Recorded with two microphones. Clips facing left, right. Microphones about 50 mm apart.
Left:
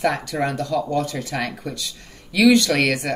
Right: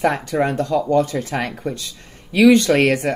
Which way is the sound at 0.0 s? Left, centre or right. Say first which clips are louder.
Right 3 dB; right.